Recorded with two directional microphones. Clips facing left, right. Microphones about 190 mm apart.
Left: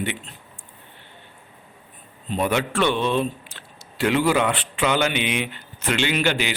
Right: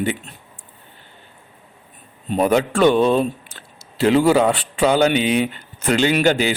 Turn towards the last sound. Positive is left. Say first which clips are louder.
# right 6 dB
turn(degrees=-40)  # may be behind; listen again after turning